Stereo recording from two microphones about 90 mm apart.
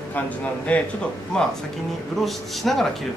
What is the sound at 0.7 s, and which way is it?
A man's voice, 15° left (ahead or behind).